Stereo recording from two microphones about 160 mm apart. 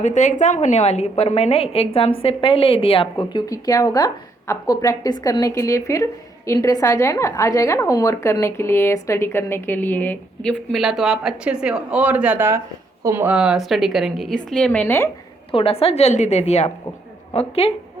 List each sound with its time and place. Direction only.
0.0 s a woman's voice: 50° left (ahead or behind); by 15.1 s 15° left (ahead or behind)
15.5 s a woman's voice: 35° left (ahead or behind)